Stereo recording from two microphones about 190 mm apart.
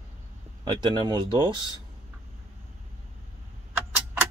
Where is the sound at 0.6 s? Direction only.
20° right (ahead or behind).